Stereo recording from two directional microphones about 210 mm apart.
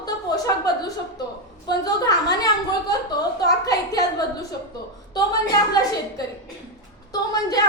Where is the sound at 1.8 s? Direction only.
15° left (ahead or behind).